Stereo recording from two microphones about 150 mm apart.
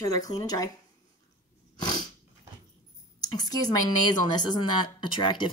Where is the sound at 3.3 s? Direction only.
25° left (ahead or behind).